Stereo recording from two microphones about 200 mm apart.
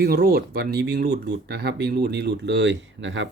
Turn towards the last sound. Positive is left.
turn(degrees=-65)  # may be behind; listen again after turning